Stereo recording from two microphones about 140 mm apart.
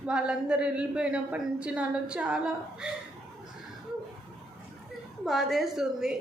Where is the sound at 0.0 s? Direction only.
5° right (ahead or behind).